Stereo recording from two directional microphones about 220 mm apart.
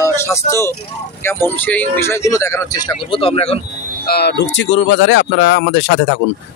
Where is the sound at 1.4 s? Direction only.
10° left (ahead or behind); by 3.6 s 25° left (ahead or behind).